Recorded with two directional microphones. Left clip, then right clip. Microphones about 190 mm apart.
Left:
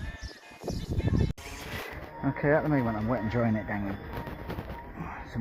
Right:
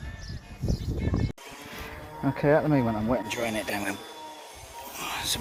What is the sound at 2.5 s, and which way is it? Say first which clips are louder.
Speech: right 3 dB; 30° right (ahead or behind).